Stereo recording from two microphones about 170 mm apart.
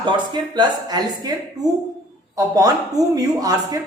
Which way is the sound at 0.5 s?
25° right (ahead or behind).